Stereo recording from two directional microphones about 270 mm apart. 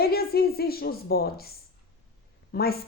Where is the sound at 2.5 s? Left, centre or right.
Left.